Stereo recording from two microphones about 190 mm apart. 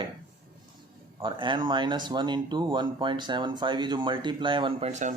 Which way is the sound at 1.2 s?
25° right (ahead or behind).